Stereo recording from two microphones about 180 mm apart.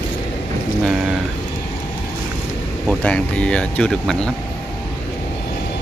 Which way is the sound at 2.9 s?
5° left (ahead or behind).